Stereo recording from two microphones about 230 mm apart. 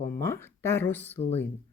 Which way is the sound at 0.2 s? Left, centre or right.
Centre.